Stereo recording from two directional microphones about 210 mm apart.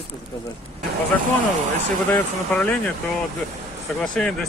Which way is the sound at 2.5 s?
5° left (ahead or behind).